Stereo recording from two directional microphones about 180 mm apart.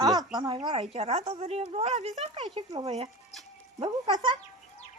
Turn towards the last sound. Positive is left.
turn(degrees=-25)  # may be behind; listen again after turning